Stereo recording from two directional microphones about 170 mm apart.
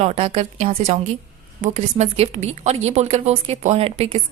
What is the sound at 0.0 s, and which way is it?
A woman's voice, 40° right (ahead or behind).